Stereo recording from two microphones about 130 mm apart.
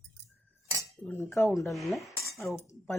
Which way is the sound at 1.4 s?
20° left (ahead or behind).